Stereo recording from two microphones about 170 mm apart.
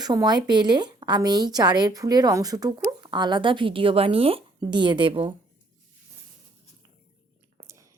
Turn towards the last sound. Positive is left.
turn(degrees=-15)  # may be behind; listen again after turning